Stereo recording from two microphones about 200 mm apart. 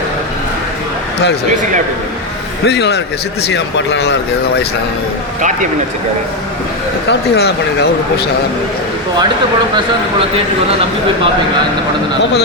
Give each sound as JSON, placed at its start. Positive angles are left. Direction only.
{"t": 2.6, "sound": "speech", "side_deg": 55}
{"t": 7.1, "sound": "speech", "side_deg": 55}
{"t": 9.7, "sound": "speech", "side_deg": -30}